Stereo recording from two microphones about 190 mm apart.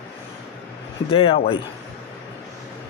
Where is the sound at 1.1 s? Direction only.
30° left (ahead or behind).